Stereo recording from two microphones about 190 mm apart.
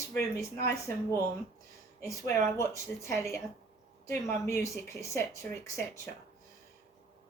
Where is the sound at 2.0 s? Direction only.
15° left (ahead or behind).